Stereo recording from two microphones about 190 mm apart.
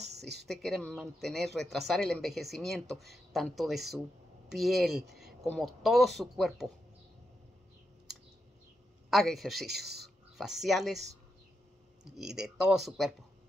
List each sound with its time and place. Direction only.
0.0 s a sound: 60° right (ahead or behind)
0.5 s speech: centre (ahead or behind)
9.1 s speech: centre (ahead or behind)
12.2 s speech: centre (ahead or behind)